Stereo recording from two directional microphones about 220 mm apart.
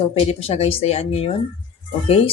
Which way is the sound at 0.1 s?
25° left (ahead or behind).